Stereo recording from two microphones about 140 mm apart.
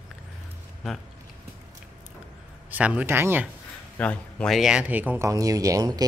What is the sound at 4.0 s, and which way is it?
A man's voice, 10° left (ahead or behind).